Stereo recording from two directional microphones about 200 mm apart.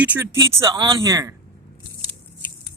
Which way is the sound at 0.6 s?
20° right (ahead or behind).